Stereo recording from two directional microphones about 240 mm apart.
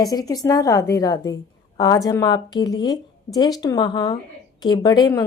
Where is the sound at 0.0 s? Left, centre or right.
Centre.